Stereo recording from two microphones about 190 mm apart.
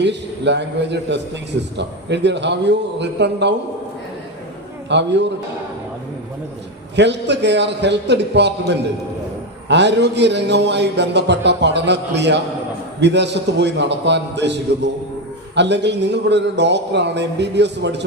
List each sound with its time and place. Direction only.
0.0 s a man's voice: 65° right (ahead or behind)
4.9 s a man's voice: 65° right (ahead or behind)
6.9 s a man's voice: 65° right (ahead or behind)